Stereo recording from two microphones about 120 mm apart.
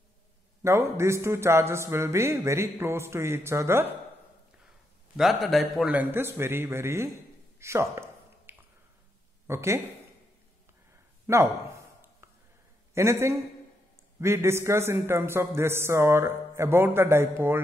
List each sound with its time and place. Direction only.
0.6 s a man's voice: 20° right (ahead or behind)
5.1 s a man's voice: centre (ahead or behind)
5.9 s a man's voice: 15° right (ahead or behind)
7.5 s a sound: 25° right (ahead or behind)
9.5 s a man's voice: 25° right (ahead or behind)
11.3 s speech: 25° right (ahead or behind)
12.2 s whispering: 20° right (ahead or behind)
12.9 s a man's voice: 20° right (ahead or behind)